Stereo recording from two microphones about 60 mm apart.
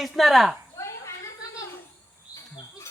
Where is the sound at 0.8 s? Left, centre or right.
Left.